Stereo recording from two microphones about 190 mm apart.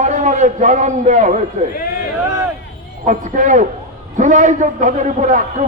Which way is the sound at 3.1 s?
40° right (ahead or behind).